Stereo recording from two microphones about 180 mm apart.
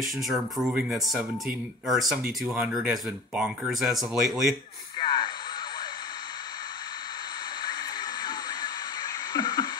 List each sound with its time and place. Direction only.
0.0 s speech: centre (ahead or behind)
4.9 s radio: 25° left (ahead or behind)
7.6 s a sound: 25° left (ahead or behind)